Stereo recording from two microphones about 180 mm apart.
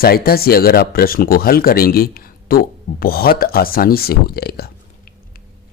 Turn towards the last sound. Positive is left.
turn(degrees=60)  # may be behind; listen again after turning